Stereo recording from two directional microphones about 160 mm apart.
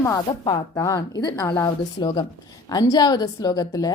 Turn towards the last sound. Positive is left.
turn(degrees=25)  # may be behind; listen again after turning